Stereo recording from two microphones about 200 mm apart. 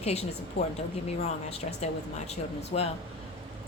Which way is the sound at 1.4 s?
30° left (ahead or behind).